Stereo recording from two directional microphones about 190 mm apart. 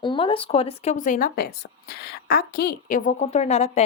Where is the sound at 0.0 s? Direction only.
25° left (ahead or behind).